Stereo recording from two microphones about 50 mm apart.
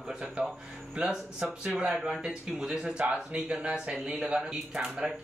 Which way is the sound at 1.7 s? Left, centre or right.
Right.